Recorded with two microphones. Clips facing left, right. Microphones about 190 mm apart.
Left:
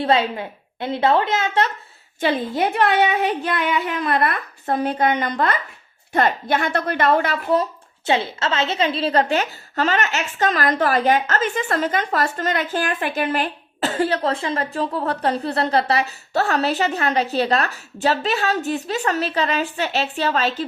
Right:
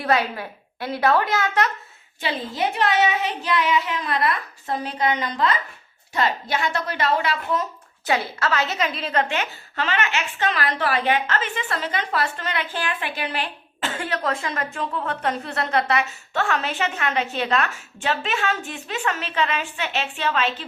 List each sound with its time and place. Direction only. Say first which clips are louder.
0.0 s a woman's voice: left 3 dB; 25° left (ahead or behind)
2.2 s a woman's voice: left 5 dB; 55° left (ahead or behind)
7.5 s a woman's voice: left 6 dB; 30° left (ahead or behind)